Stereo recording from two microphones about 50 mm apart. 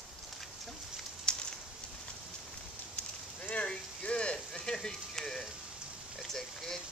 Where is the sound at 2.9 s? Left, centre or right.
Left.